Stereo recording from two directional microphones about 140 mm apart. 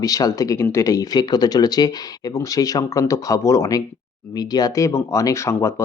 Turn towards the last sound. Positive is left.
turn(degrees=20)  # may be behind; listen again after turning